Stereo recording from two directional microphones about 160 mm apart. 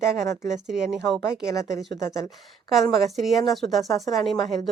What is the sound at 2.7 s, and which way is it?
Speech, centre (ahead or behind).